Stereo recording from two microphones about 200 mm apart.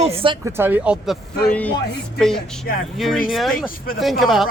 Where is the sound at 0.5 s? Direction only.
10° right (ahead or behind).